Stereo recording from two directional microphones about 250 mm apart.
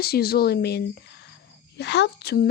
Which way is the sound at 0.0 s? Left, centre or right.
Left.